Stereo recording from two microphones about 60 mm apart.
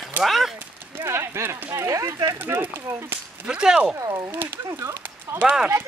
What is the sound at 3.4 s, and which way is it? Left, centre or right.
Speech, centre.